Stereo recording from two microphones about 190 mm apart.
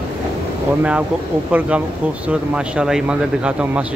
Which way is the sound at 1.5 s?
5° right (ahead or behind).